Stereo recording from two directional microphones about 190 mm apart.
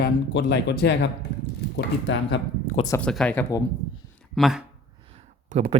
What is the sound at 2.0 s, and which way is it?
Speech, 70° left (ahead or behind).